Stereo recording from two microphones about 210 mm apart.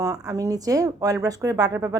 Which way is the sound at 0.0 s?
15° right (ahead or behind).